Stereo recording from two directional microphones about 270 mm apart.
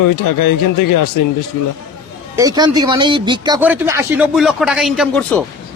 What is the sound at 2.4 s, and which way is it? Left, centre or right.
Speech, centre.